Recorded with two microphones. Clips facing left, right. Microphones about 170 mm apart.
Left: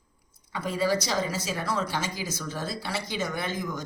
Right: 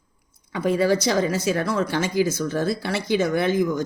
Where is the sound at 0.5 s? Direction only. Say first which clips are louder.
Right 7 dB; 60° right (ahead or behind).